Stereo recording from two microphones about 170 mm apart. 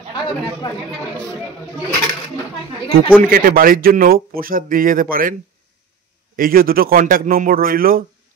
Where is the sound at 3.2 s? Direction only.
55° right (ahead or behind).